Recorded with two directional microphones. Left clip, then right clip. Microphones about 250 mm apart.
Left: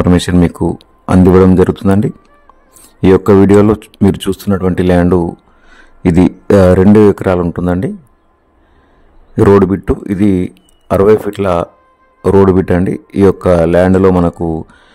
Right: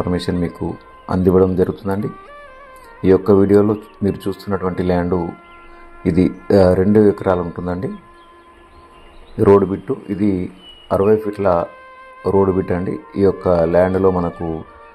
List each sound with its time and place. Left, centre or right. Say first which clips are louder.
0.0 s a man's voice: left 9 dB; left
3.0 s speech: left 5 dB; left
6.4 s speech: left 5 dB; left
9.4 s a man's voice: left 4 dB; left